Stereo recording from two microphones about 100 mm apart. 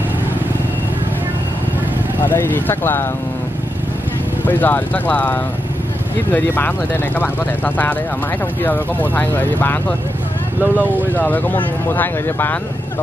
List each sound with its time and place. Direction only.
2.2 s speech: 20° left (ahead or behind)
4.5 s speech: 15° left (ahead or behind)
11.1 s speech: 15° left (ahead or behind)